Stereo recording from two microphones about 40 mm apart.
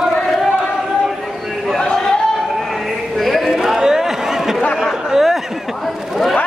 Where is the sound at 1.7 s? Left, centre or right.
Centre.